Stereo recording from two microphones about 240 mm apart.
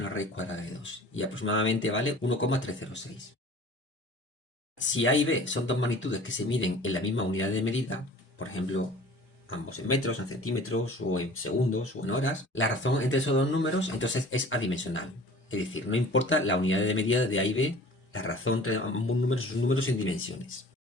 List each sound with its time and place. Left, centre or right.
0.0 s speech: left
4.8 s speech: left